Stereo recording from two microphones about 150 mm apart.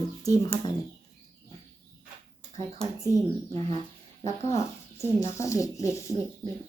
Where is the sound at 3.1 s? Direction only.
30° left (ahead or behind).